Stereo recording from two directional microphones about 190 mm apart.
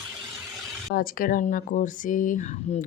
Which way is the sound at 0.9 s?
50° left (ahead or behind).